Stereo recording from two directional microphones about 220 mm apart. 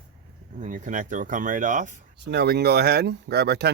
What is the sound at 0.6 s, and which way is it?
Speech, 35° right (ahead or behind).